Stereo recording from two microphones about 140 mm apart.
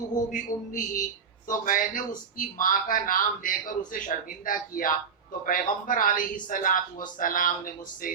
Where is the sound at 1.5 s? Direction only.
75° left (ahead or behind).